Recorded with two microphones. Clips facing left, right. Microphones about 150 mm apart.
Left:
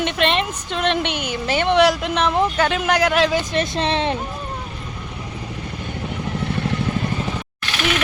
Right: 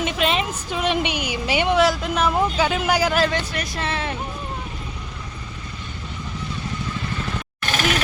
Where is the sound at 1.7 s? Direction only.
Centre (ahead or behind).